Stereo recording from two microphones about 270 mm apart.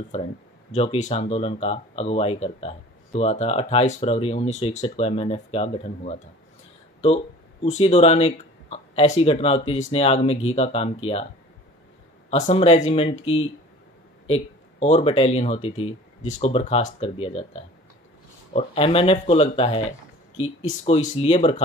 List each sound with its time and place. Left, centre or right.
0.7 s speech: left
7.6 s speech: left
12.3 s speech: left
18.5 s speech: left